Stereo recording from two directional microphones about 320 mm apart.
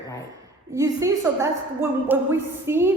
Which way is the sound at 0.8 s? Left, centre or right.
Centre.